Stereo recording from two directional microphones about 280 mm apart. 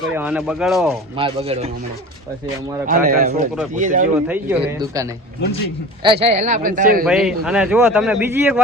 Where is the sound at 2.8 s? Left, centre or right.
Right.